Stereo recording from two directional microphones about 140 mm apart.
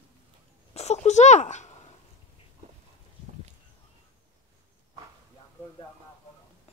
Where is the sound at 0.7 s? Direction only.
50° left (ahead or behind).